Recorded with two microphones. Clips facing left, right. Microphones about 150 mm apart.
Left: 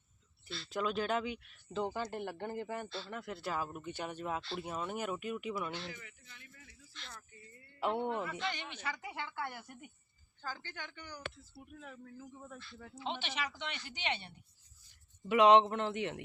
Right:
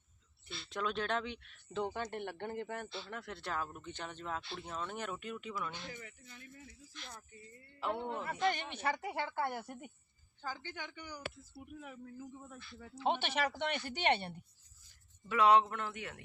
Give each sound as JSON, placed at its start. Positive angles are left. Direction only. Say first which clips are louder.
{"t": 0.7, "sound": "speech", "louder": "left 2 dB", "side_deg": 5}
{"t": 5.9, "sound": "a man's voice", "louder": "right 2 dB", "side_deg": -35}
{"t": 6.9, "sound": "speech", "louder": "even", "side_deg": -15}
{"t": 8.2, "sound": "speech", "louder": "right 4 dB", "side_deg": -45}
{"t": 10.4, "sound": "speech", "louder": "right 1 dB", "side_deg": -15}
{"t": 13.1, "sound": "speech", "louder": "right 6 dB", "side_deg": -55}
{"t": 15.3, "sound": "a man's voice", "louder": "left 3 dB", "side_deg": 20}